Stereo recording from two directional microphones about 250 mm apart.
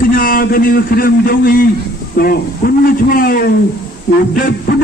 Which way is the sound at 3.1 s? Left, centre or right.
Left.